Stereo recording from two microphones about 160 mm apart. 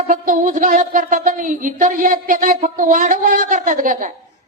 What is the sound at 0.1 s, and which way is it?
Speech, 55° right (ahead or behind).